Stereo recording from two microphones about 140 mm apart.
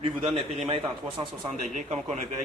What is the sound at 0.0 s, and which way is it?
Speech, 45° right (ahead or behind).